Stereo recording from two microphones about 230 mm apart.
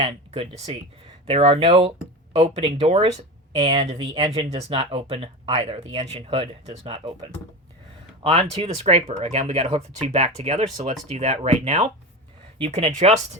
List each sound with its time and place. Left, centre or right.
0.0 s speech: right